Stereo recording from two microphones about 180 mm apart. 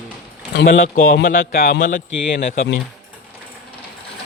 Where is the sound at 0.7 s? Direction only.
50° left (ahead or behind).